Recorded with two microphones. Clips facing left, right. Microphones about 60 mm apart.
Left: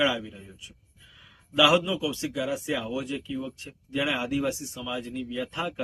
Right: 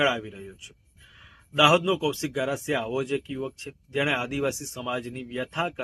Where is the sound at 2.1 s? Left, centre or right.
Right.